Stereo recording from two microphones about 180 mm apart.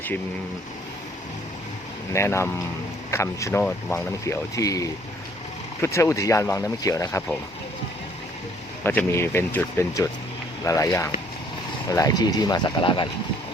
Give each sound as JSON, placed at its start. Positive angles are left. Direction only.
{"t": 2.1, "sound": "speech", "side_deg": 15}
{"t": 8.8, "sound": "speech", "side_deg": 10}